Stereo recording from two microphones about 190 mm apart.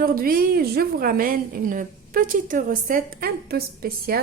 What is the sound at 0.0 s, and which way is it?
A woman's voice, 50° right (ahead or behind).